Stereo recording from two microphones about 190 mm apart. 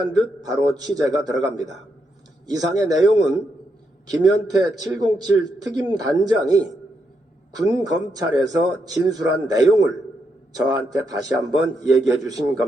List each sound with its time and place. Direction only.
0.0 s a man's voice: 20° right (ahead or behind)